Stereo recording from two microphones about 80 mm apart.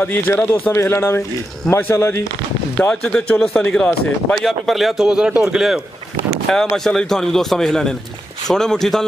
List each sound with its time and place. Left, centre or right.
0.0 s speech: left
3.0 s speech: centre
4.4 s a man's voice: centre
6.5 s a man's voice: centre